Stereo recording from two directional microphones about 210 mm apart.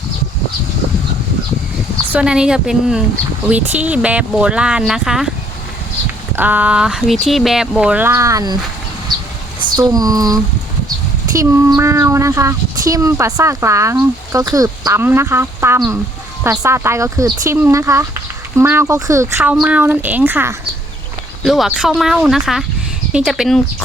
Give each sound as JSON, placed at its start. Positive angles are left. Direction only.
{"t": 2.0, "sound": "speech", "side_deg": -5}
{"t": 6.3, "sound": "speech", "side_deg": -10}
{"t": 9.6, "sound": "speech", "side_deg": -20}